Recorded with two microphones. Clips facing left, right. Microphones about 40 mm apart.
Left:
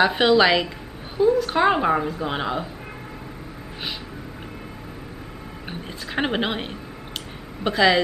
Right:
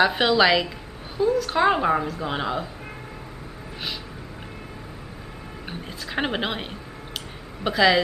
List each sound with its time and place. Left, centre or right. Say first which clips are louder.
0.0 s a woman's voice: left 2 dB; centre
5.7 s a woman's voice: left 1 dB; centre